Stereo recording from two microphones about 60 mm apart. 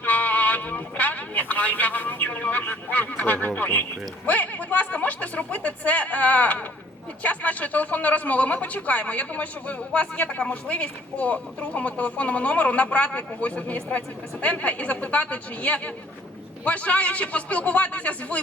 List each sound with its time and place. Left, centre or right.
0.0 s music: left
4.3 s speech: left